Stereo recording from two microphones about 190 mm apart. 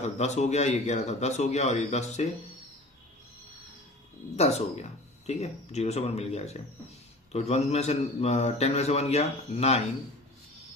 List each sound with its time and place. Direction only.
0.0 s a man's voice: 35° left (ahead or behind)
4.4 s a man's voice: 35° left (ahead or behind)